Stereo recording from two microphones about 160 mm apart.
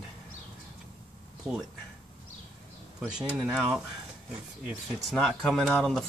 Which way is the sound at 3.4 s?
Centre (ahead or behind).